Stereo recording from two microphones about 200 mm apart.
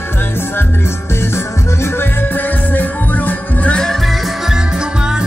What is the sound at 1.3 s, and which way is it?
Music, 10° left (ahead or behind).